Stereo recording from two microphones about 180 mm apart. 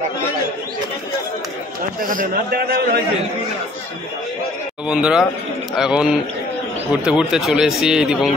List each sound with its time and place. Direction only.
2.0 s a man's voice: 50° right (ahead or behind)
4.8 s speech: 5° right (ahead or behind)